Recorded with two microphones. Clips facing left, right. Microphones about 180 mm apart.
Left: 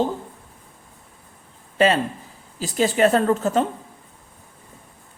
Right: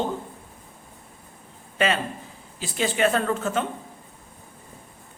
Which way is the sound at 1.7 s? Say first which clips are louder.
Left 6 dB; 35° left (ahead or behind).